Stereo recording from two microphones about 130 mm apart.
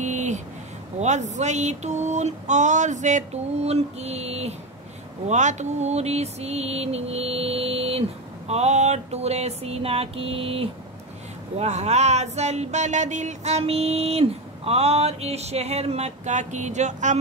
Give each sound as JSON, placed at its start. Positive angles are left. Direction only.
{"t": 0.0, "sound": "vehicle", "side_deg": -65}
{"t": 0.9, "sound": "speech", "side_deg": -65}
{"t": 5.3, "sound": "mantra", "side_deg": -65}
{"t": 11.5, "sound": "speech", "side_deg": -60}